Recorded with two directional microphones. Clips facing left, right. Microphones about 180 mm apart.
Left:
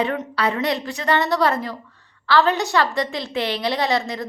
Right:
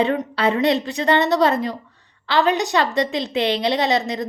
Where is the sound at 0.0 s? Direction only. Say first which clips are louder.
Right 3 dB; 25° right (ahead or behind).